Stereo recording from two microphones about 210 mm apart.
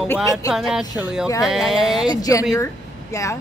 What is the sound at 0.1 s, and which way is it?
Speech, 15° left (ahead or behind).